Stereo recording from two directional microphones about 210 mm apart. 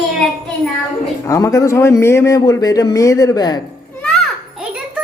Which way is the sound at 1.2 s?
15° left (ahead or behind).